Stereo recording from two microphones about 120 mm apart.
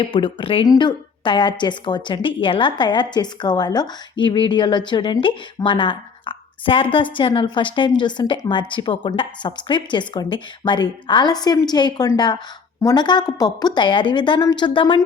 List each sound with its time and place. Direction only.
0.0 s speech: 45° left (ahead or behind)
0.6 s a woman's voice: 35° left (ahead or behind)